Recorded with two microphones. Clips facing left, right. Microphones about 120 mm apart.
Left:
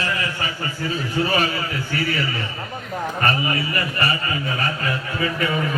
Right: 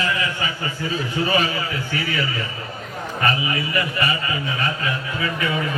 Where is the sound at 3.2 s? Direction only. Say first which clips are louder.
Right 1 dB; 45° left (ahead or behind).